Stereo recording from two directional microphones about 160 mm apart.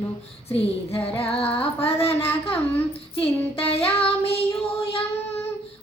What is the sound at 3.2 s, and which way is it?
Child singing, 35° left (ahead or behind).